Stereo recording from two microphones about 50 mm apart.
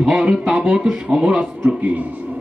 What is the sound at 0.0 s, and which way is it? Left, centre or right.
A man's voice, centre.